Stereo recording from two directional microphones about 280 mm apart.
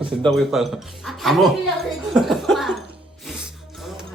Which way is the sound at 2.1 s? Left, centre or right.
Centre.